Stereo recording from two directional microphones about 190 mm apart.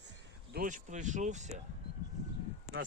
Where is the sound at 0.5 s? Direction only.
45° right (ahead or behind).